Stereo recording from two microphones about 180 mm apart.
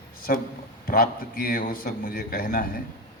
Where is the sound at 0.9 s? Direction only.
55° left (ahead or behind).